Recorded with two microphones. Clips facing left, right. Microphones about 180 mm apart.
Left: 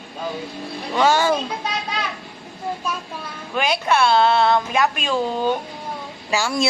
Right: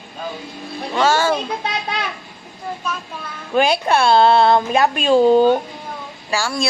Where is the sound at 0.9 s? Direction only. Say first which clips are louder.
Right 1 dB; 15° left (ahead or behind).